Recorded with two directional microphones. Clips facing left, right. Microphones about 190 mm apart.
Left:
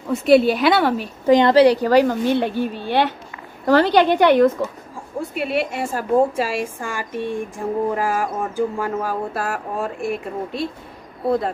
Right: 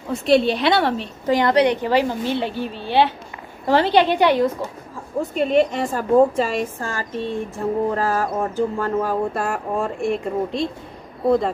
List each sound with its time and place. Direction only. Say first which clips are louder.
0.1 s a woman's voice: left 3 dB; centre (ahead or behind)
1.2 s a woman's voice: left 4 dB; 20° left (ahead or behind); by 4.5 s 55° left (ahead or behind)
5.3 s a woman's voice: right 5 dB; 10° left (ahead or behind)